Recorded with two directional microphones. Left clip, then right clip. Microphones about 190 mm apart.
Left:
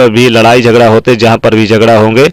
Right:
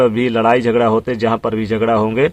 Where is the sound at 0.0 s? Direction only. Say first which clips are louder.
Left 9 dB; 30° left (ahead or behind).